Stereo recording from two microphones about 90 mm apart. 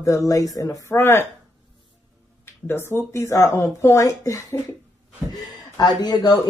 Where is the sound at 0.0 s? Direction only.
35° left (ahead or behind).